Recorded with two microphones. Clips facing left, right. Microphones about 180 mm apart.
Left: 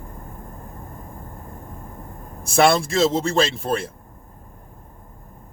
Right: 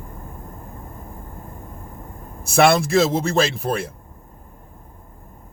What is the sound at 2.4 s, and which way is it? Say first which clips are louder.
Speech: right 1 dB; 30° left (ahead or behind).